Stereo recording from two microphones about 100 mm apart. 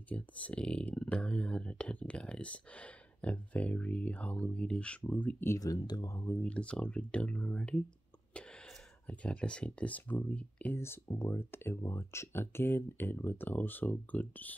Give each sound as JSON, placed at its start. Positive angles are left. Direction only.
{"t": 0.1, "sound": "speech", "side_deg": 10}
{"t": 5.6, "sound": "speech", "side_deg": 40}
{"t": 6.4, "sound": "speech", "side_deg": 10}
{"t": 9.0, "sound": "speech", "side_deg": 15}
{"t": 10.8, "sound": "speech", "side_deg": 25}